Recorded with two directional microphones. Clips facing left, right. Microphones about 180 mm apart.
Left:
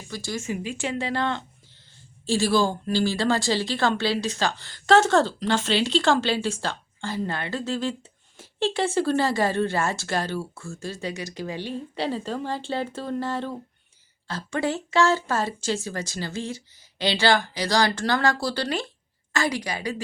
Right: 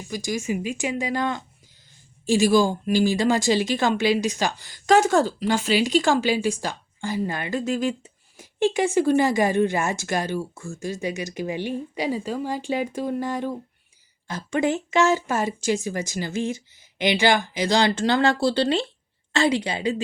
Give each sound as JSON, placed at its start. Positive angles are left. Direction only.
{"t": 0.1, "sound": "a woman's voice", "side_deg": -15}